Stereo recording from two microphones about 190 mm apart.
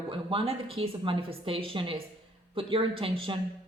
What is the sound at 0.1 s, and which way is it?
A man's voice, 30° right (ahead or behind).